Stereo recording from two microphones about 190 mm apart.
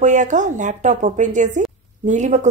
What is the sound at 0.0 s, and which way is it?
A woman's voice, 40° right (ahead or behind).